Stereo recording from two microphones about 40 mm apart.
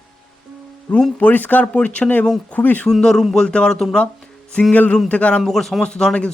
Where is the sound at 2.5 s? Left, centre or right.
Left.